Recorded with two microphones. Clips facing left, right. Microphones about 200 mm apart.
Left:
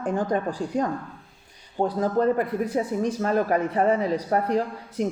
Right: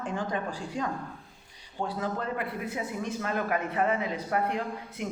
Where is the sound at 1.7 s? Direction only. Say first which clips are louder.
Left 9 dB; 40° left (ahead or behind).